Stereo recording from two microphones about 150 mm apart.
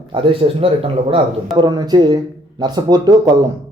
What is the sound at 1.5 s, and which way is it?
Speech, 30° right (ahead or behind).